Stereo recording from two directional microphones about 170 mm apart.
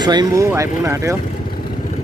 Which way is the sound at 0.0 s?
25° right (ahead or behind).